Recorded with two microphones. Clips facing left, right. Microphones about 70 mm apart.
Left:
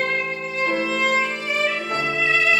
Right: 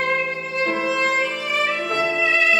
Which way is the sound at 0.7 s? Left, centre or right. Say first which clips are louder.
Even; centre.